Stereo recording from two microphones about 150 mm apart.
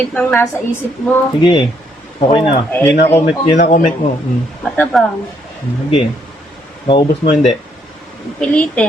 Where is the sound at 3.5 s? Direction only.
60° left (ahead or behind).